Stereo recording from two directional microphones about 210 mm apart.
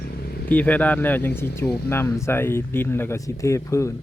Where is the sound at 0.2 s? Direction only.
50° left (ahead or behind).